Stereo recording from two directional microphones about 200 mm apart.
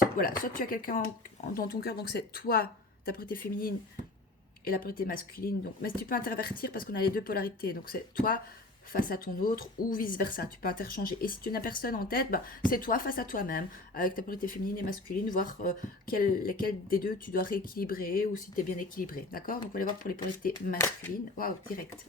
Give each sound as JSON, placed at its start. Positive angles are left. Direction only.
{"t": 0.2, "sound": "speech", "side_deg": 45}
{"t": 21.3, "sound": "speech", "side_deg": 45}